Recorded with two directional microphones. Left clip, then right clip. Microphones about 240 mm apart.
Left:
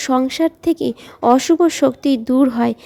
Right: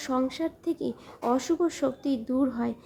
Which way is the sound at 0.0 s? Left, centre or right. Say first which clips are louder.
Left 12 dB; left.